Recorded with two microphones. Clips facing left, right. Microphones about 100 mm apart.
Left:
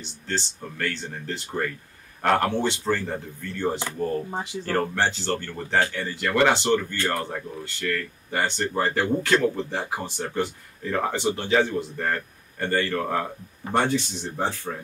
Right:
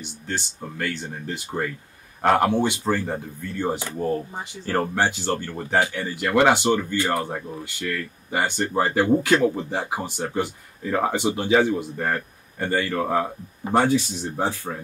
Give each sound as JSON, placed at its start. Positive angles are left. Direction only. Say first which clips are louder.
{"t": 0.3, "sound": "speech", "louder": "even", "side_deg": -10}